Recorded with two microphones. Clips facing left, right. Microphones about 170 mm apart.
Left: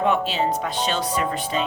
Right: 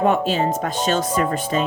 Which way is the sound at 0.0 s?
45° right (ahead or behind).